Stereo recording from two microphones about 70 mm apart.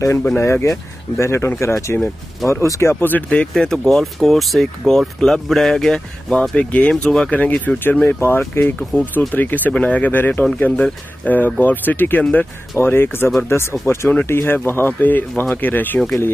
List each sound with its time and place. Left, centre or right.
0.4 s speech: left
3.2 s speech: centre
6.5 s speech: left
6.9 s speech: centre; by 16.0 s left